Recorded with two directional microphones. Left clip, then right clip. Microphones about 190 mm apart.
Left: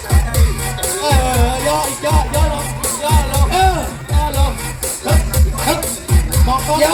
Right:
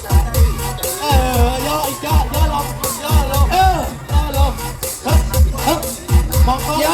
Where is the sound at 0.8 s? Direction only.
25° left (ahead or behind).